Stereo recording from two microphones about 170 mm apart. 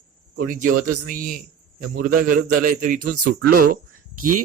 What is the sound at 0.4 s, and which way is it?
A man's voice, 55° right (ahead or behind).